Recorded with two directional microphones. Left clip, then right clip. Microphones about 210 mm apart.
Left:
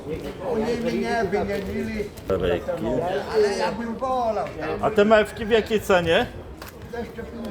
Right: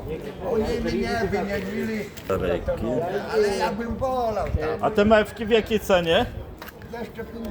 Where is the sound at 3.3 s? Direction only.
50° right (ahead or behind).